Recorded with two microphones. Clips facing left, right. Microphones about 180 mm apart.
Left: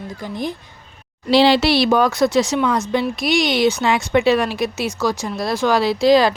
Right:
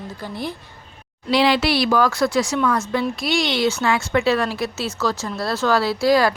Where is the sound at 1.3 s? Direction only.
30° left (ahead or behind).